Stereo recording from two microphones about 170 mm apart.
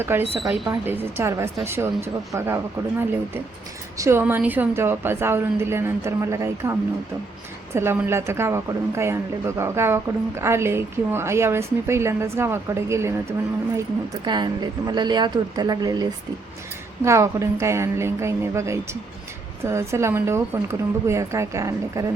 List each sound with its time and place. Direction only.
0.0 s a woman's voice: 15° right (ahead or behind)
0.4 s a woman's voice: centre (ahead or behind)
0.7 s a woman's voice: 15° right (ahead or behind)
3.9 s a woman's voice: 15° right (ahead or behind)